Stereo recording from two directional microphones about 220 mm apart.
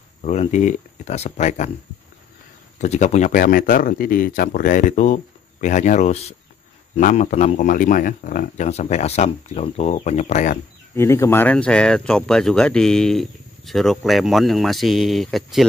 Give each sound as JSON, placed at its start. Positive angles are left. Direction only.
{"t": 0.2, "sound": "speech", "side_deg": 30}
{"t": 2.8, "sound": "speech", "side_deg": 30}
{"t": 11.0, "sound": "speech", "side_deg": 10}